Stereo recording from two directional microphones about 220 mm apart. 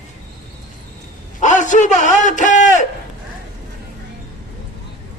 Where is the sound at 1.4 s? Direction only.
35° left (ahead or behind).